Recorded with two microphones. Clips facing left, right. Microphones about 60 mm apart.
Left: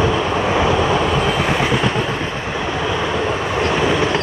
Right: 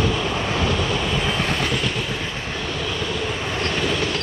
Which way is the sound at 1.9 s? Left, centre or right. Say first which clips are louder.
Left 6 dB; left.